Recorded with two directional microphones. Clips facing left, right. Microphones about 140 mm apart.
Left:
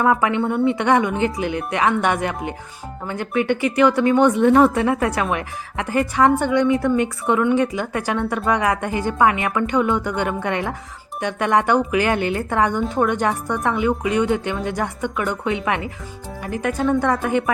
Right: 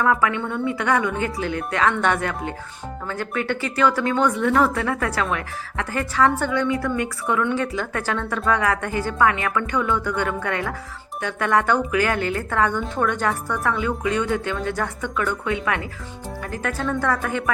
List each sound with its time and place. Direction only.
0.0 s speech: 20° left (ahead or behind)